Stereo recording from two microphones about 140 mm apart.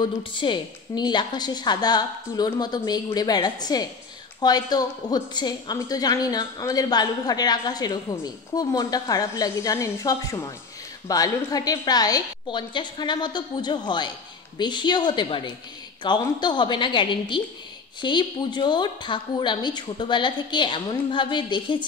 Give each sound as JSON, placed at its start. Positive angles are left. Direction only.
{"t": 0.0, "sound": "a woman's voice", "side_deg": 35}